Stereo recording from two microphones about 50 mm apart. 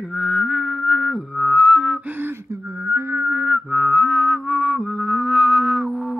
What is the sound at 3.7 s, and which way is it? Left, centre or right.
Music, centre.